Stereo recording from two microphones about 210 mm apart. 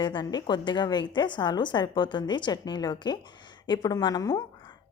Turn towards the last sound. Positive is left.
turn(degrees=15)  # may be behind; listen again after turning